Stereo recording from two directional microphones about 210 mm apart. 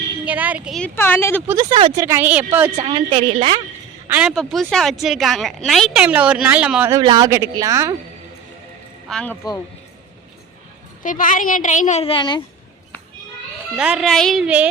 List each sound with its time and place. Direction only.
0.3 s speech: 5° right (ahead or behind)
0.9 s speech: 10° left (ahead or behind)
1.4 s speech: 10° right (ahead or behind)
1.7 s a woman's voice: 25° right (ahead or behind)
2.0 s speech: 10° right (ahead or behind)
2.7 s a woman's voice: 25° right (ahead or behind)
4.1 s a woman's voice: 5° right (ahead or behind)
6.9 s speech: 20° right (ahead or behind)
9.0 s a woman's voice: 5° left (ahead or behind)
11.0 s speech: 40° left (ahead or behind); by 12.4 s 20° left (ahead or behind)
13.7 s a woman's voice: 5° right (ahead or behind)